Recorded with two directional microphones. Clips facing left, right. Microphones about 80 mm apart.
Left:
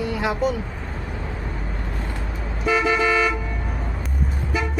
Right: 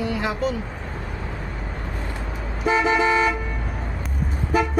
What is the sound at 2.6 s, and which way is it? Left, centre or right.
Car, right.